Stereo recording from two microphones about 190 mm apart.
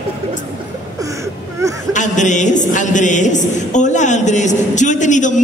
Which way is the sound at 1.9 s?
40° left (ahead or behind).